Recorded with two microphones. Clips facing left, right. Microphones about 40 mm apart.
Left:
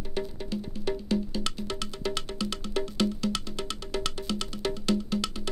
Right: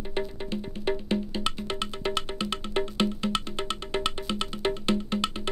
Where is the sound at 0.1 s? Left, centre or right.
Right.